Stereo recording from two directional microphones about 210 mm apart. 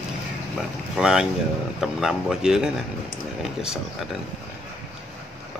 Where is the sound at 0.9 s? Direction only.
5° right (ahead or behind).